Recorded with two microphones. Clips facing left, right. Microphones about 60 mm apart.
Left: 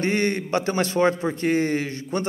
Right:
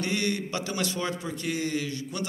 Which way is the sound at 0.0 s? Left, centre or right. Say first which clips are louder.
Left 6 dB; left.